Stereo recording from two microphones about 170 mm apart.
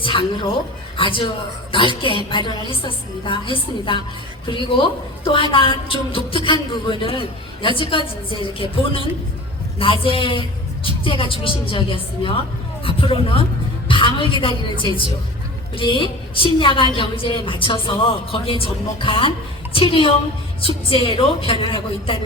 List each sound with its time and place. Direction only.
0.0 s a woman's voice: 30° left (ahead or behind)